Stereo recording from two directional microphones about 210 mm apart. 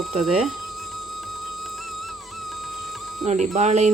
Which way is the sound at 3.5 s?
35° right (ahead or behind).